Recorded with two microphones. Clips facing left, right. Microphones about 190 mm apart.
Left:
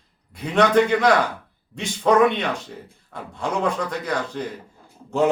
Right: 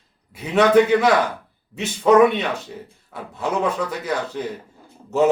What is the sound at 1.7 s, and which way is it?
A man's voice, 5° right (ahead or behind).